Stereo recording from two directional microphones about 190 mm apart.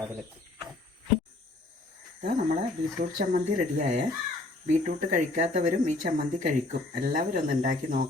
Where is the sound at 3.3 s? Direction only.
40° right (ahead or behind).